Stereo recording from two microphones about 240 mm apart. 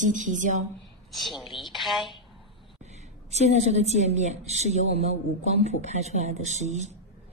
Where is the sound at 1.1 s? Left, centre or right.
Centre.